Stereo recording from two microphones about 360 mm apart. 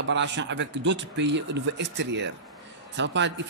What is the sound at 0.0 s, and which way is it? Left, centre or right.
A man's voice, right.